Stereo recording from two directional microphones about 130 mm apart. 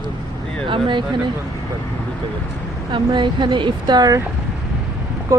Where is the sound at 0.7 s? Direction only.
35° right (ahead or behind).